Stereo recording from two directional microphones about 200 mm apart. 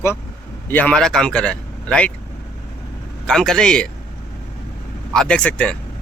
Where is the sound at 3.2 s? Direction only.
5° left (ahead or behind).